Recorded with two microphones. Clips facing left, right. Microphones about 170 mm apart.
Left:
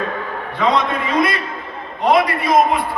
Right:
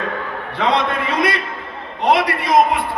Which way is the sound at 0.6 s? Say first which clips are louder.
Left 1 dB; 70° right (ahead or behind).